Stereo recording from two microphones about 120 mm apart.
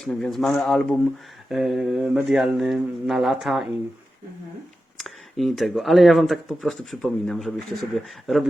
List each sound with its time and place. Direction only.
0.0 s speech: 5° left (ahead or behind)
4.9 s speech: centre (ahead or behind)